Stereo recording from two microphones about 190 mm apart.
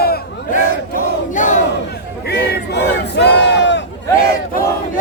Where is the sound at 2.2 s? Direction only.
60° left (ahead or behind).